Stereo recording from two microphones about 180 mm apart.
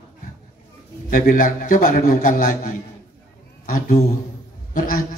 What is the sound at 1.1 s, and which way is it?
A man's voice, 50° left (ahead or behind).